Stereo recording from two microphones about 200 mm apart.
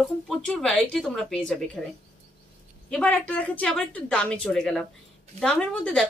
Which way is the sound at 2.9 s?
5° left (ahead or behind).